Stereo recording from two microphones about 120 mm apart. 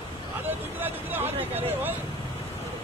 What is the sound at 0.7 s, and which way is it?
Speech, 15° right (ahead or behind).